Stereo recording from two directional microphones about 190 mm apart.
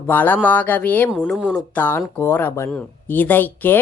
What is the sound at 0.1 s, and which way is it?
Speech, 10° left (ahead or behind).